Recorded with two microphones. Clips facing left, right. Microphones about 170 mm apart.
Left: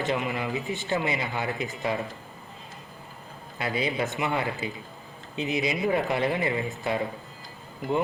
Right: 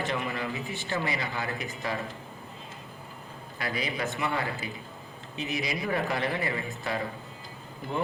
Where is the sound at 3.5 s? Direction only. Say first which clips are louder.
Left 5 dB; 25° left (ahead or behind).